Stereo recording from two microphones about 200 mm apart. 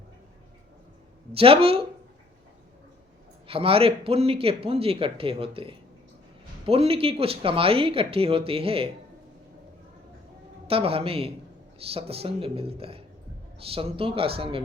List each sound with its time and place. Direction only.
1.3 s speech: 30° right (ahead or behind)
3.4 s speech: 30° right (ahead or behind)
10.7 s speech: 30° right (ahead or behind)